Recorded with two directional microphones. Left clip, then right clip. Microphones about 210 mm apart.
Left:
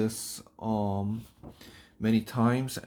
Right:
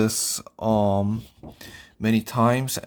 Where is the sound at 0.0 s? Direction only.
55° right (ahead or behind).